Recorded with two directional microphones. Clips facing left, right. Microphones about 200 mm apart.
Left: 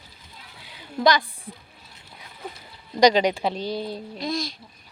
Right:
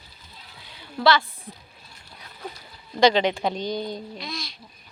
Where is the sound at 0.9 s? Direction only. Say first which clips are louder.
Even; 15° left (ahead or behind).